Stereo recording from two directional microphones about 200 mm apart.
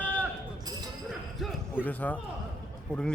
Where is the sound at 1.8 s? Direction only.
10° left (ahead or behind).